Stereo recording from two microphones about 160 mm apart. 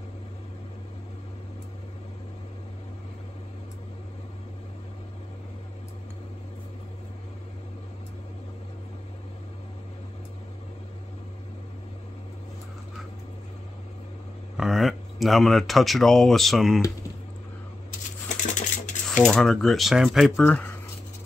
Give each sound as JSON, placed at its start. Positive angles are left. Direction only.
{"t": 14.6, "sound": "speech", "side_deg": 0}
{"t": 18.4, "sound": "a sound", "side_deg": 50}
{"t": 19.0, "sound": "speech", "side_deg": 5}
{"t": 20.4, "sound": "speech", "side_deg": 10}